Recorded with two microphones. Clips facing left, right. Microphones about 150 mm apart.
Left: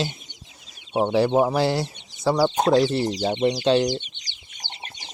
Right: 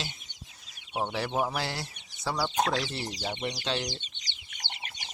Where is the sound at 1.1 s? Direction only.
30° left (ahead or behind).